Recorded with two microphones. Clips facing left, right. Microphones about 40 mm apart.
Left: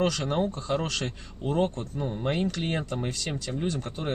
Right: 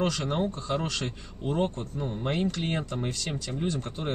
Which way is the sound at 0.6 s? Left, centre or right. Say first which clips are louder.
Left 2 dB; centre.